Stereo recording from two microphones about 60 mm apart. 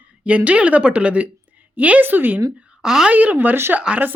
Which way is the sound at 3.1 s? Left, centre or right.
Right.